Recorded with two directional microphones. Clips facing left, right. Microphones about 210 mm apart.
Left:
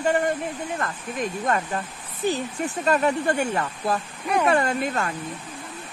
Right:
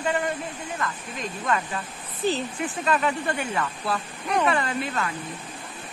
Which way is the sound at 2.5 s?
40° left (ahead or behind).